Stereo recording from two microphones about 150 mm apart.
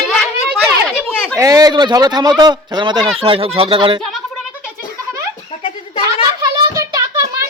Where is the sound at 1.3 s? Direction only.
25° right (ahead or behind).